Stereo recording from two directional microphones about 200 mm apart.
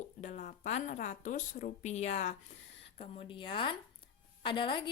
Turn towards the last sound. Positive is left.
turn(degrees=25)  # may be behind; listen again after turning